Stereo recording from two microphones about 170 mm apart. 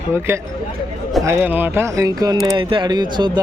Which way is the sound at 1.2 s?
15° right (ahead or behind).